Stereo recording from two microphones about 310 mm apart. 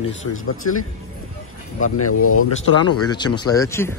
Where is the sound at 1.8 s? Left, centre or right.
Left.